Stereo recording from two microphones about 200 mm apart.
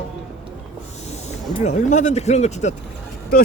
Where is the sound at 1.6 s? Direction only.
35° left (ahead or behind).